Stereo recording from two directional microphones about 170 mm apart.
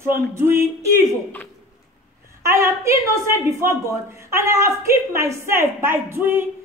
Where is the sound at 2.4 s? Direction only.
15° right (ahead or behind).